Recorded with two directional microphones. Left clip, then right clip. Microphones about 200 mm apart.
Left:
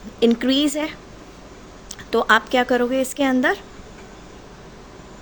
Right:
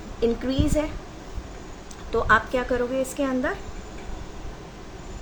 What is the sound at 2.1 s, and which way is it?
A woman's voice, 50° left (ahead or behind).